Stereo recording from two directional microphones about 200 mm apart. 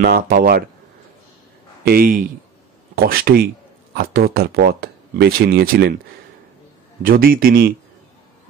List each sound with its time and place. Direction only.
0.0 s speech: 45° right (ahead or behind)
1.9 s speech: 45° right (ahead or behind)
7.0 s speech: 45° right (ahead or behind)